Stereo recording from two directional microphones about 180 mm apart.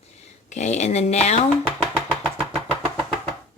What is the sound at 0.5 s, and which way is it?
Speech, 40° left (ahead or behind).